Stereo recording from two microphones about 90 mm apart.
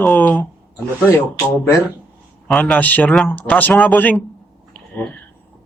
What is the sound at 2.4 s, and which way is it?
Speech, 10° left (ahead or behind).